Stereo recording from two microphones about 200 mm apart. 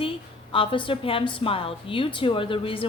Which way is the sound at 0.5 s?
25° left (ahead or behind).